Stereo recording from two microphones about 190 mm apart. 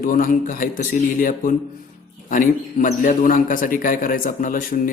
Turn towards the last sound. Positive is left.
turn(degrees=45)  # may be behind; listen again after turning